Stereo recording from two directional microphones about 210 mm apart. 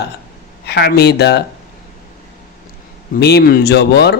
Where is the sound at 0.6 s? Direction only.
50° left (ahead or behind).